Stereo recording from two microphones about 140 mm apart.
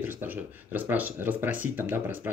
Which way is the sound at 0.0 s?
15° right (ahead or behind).